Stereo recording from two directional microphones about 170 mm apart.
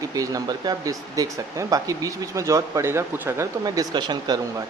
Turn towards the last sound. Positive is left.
turn(degrees=-25)  # may be behind; listen again after turning